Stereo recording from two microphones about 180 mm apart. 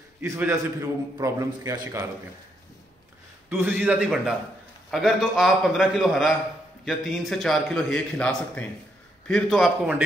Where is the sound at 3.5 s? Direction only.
10° right (ahead or behind).